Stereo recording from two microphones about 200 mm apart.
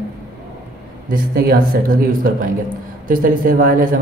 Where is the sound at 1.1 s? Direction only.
50° right (ahead or behind).